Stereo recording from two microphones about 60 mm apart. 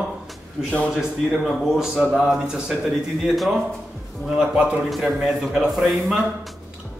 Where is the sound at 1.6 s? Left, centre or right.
Centre.